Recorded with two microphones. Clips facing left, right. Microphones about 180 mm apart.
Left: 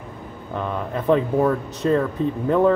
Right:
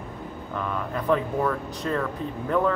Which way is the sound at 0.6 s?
25° left (ahead or behind).